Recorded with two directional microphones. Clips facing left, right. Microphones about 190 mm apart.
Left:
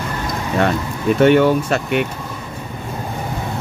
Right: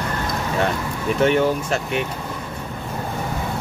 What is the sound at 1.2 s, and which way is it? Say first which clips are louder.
Speech: left 6 dB; 65° left (ahead or behind).